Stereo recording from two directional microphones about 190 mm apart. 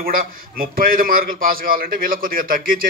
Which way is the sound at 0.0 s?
50° right (ahead or behind).